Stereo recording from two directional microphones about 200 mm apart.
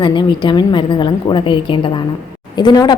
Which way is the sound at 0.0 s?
25° left (ahead or behind).